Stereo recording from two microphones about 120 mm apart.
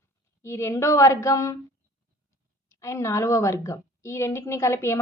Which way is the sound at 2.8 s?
25° left (ahead or behind).